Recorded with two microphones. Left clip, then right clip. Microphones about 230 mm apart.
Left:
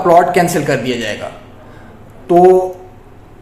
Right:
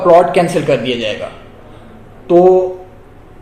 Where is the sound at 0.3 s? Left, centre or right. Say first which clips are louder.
Right 1 dB; left.